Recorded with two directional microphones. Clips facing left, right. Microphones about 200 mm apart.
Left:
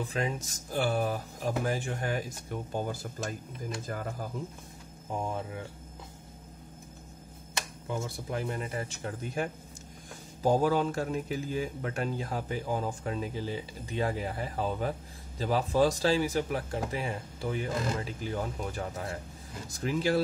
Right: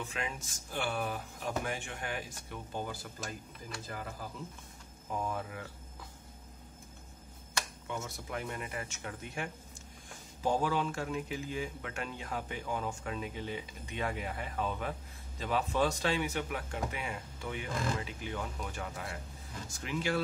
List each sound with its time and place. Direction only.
0.0 s speech: 35° left (ahead or behind)
5.1 s speech: 25° left (ahead or behind)
7.8 s speech: 30° left (ahead or behind)